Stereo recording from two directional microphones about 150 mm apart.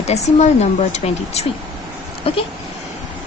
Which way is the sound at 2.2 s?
40° left (ahead or behind).